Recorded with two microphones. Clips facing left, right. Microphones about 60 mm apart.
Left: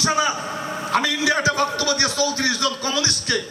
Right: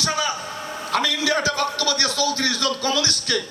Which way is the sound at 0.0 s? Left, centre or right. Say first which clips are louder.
Left 3 dB; left.